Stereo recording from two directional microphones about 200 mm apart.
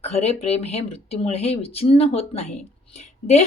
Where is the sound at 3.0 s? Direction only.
35° left (ahead or behind).